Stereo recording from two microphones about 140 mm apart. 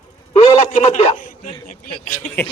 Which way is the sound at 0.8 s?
45° left (ahead or behind).